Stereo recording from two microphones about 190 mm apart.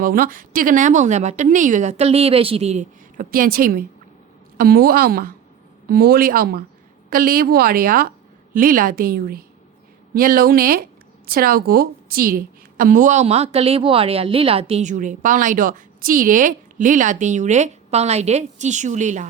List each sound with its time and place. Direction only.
0.0 s a woman's voice: 50° right (ahead or behind)